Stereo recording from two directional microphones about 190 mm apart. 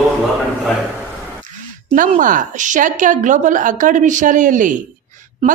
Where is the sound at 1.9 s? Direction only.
45° right (ahead or behind).